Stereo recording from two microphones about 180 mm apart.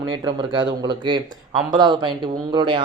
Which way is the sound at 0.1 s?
25° right (ahead or behind).